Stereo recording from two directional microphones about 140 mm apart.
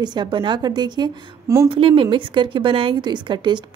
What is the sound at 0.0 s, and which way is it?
A woman's voice, 30° right (ahead or behind).